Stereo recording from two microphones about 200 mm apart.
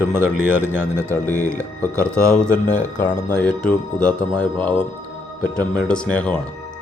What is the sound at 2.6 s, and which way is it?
Speech, 40° left (ahead or behind).